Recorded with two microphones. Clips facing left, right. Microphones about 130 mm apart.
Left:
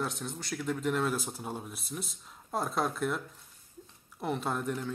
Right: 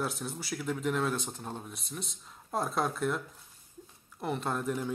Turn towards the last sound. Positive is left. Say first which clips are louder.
# even
turn(degrees=0)  # may be behind; listen again after turning